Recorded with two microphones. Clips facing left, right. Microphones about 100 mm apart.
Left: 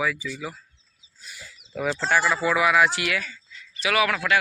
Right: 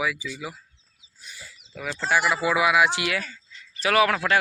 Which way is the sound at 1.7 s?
15° left (ahead or behind).